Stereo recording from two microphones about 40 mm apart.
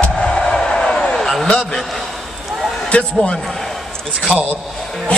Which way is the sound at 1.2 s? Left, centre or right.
Centre.